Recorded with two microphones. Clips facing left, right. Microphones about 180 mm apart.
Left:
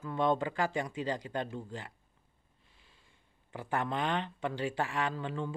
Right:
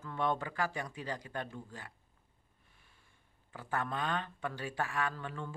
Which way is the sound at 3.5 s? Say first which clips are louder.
Left 3 dB; 25° left (ahead or behind).